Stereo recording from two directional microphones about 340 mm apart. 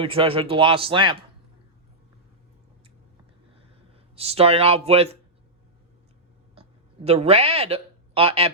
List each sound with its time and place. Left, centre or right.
0.0 s speech: centre
4.1 s speech: centre
6.6 s speech: centre